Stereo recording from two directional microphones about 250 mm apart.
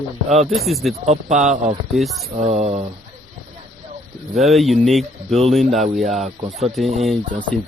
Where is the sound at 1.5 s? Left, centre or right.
Right.